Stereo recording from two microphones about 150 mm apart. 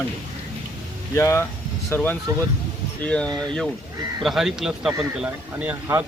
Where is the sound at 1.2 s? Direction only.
20° left (ahead or behind).